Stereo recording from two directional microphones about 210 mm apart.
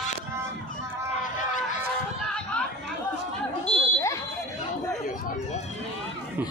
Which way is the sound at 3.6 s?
10° left (ahead or behind).